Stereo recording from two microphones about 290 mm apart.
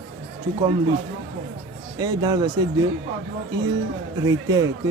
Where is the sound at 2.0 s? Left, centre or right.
Centre.